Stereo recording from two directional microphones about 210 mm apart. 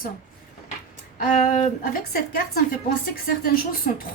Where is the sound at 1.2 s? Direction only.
40° left (ahead or behind).